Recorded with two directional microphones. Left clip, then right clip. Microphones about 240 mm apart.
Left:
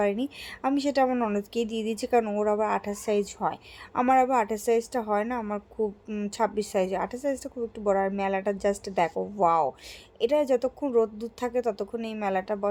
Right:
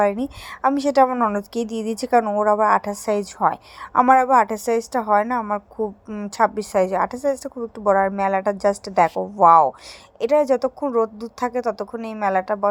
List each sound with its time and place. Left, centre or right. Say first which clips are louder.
0.0 s a woman's voice: right 7 dB; centre